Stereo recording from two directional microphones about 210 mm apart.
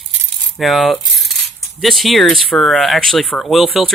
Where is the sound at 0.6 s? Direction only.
Centre (ahead or behind).